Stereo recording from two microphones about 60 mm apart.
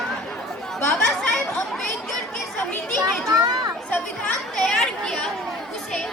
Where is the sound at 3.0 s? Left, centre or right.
Right.